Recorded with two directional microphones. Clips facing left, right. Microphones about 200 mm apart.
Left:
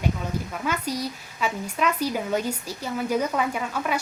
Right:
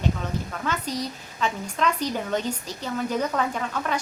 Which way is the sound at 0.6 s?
10° left (ahead or behind).